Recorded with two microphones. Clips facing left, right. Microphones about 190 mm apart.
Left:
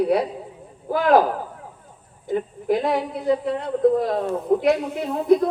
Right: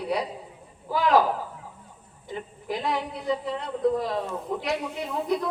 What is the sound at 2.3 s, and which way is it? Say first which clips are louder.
A woman's voice: left 11 dB; 50° left (ahead or behind).